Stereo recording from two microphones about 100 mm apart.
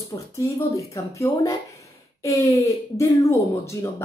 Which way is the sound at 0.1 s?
40° left (ahead or behind).